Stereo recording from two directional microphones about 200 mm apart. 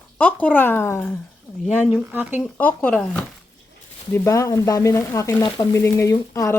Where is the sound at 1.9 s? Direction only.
10° right (ahead or behind).